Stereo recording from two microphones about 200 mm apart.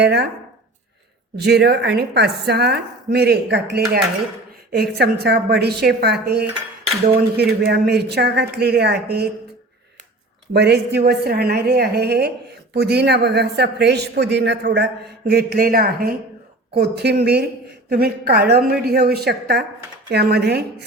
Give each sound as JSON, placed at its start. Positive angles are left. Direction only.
{"t": 0.0, "sound": "a man's voice", "side_deg": -55}
{"t": 1.5, "sound": "a man's voice", "side_deg": -55}
{"t": 10.5, "sound": "a woman's voice", "side_deg": -55}